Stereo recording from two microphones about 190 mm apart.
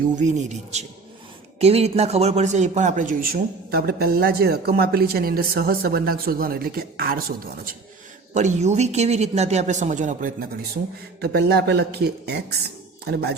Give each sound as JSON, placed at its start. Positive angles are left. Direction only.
{"t": 0.2, "sound": "a man's voice", "side_deg": -40}
{"t": 8.3, "sound": "a man's voice", "side_deg": -40}
{"t": 11.2, "sound": "speech", "side_deg": -60}